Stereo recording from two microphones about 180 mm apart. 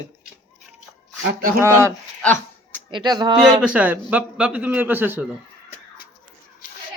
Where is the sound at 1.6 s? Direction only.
15° right (ahead or behind).